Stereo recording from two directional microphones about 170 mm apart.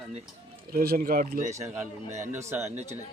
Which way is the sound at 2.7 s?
40° right (ahead or behind).